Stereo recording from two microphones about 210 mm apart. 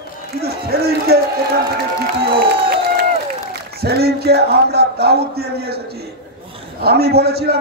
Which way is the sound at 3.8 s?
50° right (ahead or behind).